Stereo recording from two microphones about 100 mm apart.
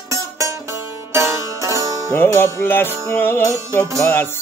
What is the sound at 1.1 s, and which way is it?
Music, 30° right (ahead or behind).